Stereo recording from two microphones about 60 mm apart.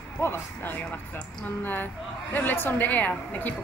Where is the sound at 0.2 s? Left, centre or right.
Left.